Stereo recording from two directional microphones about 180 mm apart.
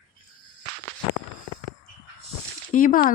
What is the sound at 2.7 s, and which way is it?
Speech, 50° left (ahead or behind).